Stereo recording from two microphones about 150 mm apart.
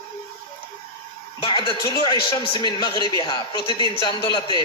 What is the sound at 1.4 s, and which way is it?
Speech, 35° left (ahead or behind).